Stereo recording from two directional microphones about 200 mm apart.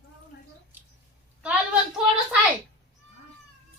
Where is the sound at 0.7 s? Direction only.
10° right (ahead or behind).